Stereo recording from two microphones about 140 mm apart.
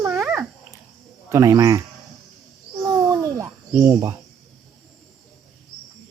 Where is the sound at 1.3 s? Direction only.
20° right (ahead or behind).